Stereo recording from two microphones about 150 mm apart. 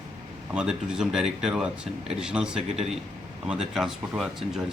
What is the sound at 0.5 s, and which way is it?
Speech, 5° right (ahead or behind).